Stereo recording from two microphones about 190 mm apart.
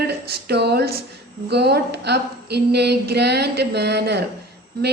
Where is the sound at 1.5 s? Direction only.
60° right (ahead or behind).